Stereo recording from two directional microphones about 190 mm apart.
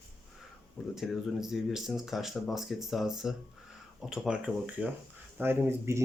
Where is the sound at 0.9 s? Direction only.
Centre (ahead or behind).